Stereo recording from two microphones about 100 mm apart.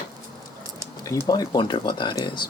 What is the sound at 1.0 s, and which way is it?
Speech, 40° left (ahead or behind).